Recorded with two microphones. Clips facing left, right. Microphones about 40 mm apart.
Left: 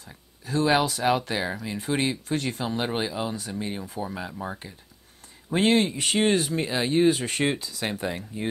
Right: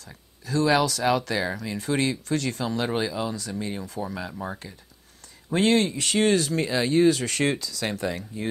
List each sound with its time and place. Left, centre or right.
0.5 s speech: left
5.5 s speech: centre